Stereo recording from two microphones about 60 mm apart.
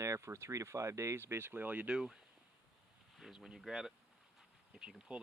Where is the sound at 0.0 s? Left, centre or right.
Right.